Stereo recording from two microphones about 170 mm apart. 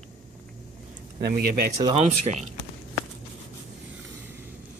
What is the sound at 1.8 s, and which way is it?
Speech, 35° right (ahead or behind).